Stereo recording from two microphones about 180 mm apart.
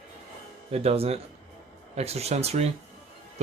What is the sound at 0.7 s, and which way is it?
Speech, 35° right (ahead or behind).